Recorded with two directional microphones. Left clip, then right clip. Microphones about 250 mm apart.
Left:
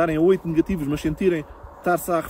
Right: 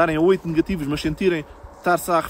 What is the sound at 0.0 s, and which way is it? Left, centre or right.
Speech, centre.